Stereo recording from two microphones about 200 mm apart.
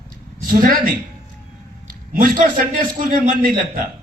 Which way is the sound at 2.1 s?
40° right (ahead or behind).